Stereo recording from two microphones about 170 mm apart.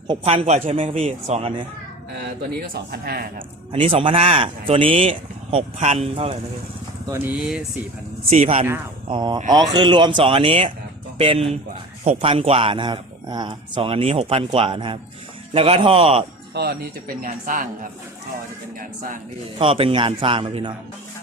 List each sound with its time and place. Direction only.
0.1 s speech: 35° right (ahead or behind)
2.7 s speech: 65° right (ahead or behind)
3.7 s speech: 35° right (ahead or behind)
7.3 s speech: 5° right (ahead or behind)
8.2 s speech: 35° right (ahead or behind)
9.0 s speech: 25° right (ahead or behind)
16.5 s speech: 80° right
17.2 s speech: 55° right (ahead or behind)
18.8 s speech: 55° right (ahead or behind)
19.5 s speech: 35° right (ahead or behind)